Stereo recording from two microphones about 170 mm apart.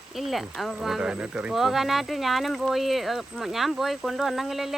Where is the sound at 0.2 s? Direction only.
Centre (ahead or behind).